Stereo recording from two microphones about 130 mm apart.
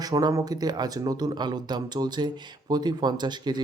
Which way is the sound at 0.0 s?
30° right (ahead or behind).